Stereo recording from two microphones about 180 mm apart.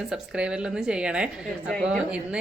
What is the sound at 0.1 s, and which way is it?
Speech, 5° right (ahead or behind).